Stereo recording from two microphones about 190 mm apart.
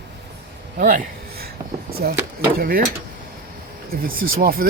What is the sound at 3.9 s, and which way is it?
Speech, 50° right (ahead or behind).